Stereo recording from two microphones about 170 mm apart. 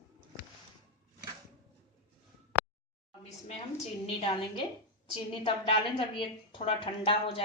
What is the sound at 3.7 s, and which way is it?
A woman's voice, 40° left (ahead or behind).